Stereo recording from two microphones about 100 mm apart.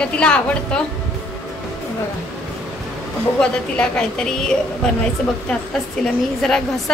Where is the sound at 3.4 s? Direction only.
10° left (ahead or behind).